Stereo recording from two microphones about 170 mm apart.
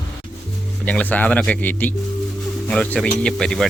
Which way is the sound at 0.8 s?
10° left (ahead or behind).